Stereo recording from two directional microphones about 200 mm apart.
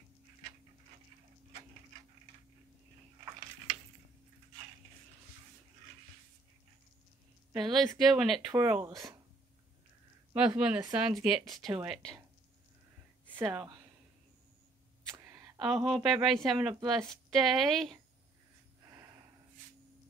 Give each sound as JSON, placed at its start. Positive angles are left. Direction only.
{"t": 7.5, "sound": "speech", "side_deg": 0}
{"t": 10.3, "sound": "speech", "side_deg": -5}
{"t": 13.3, "sound": "speech", "side_deg": -5}
{"t": 15.1, "sound": "a sound", "side_deg": -15}
{"t": 15.6, "sound": "speech", "side_deg": 0}